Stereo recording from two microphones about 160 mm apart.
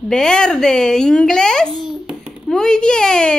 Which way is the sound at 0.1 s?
5° left (ahead or behind).